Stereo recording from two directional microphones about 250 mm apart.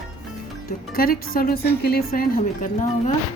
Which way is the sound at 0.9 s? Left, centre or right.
Left.